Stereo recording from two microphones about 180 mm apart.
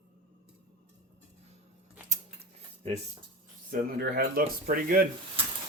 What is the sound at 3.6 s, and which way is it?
Speech, 55° right (ahead or behind).